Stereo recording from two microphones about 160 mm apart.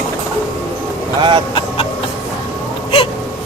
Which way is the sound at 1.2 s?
30° right (ahead or behind).